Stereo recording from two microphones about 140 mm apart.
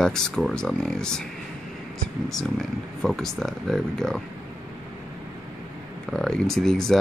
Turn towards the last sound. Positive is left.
turn(degrees=5)  # may be behind; listen again after turning